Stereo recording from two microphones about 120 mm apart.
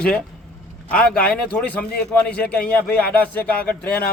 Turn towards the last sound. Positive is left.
turn(degrees=15)  # may be behind; listen again after turning